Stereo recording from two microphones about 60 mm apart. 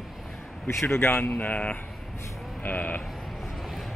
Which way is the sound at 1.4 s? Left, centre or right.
Left.